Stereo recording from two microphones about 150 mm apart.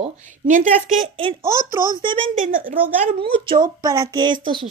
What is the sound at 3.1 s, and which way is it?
Speech, 35° right (ahead or behind).